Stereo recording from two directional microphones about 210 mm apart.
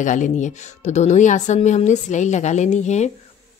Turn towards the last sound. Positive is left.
turn(degrees=35)  # may be behind; listen again after turning